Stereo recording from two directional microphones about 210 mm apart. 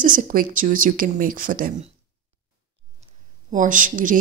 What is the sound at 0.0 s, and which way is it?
Speech, 40° right (ahead or behind).